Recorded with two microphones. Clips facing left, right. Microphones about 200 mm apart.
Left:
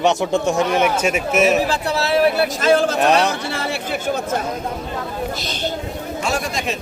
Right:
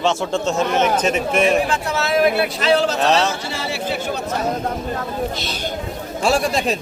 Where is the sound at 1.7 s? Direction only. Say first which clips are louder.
Left 1 dB; 35° left (ahead or behind).